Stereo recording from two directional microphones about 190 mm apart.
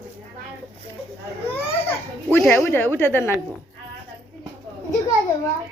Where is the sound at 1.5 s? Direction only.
30° left (ahead or behind).